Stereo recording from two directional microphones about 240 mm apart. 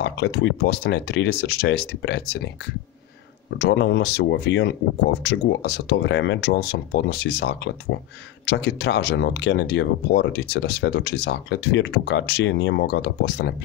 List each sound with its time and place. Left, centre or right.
0.0 s speech: left
3.4 s speech: left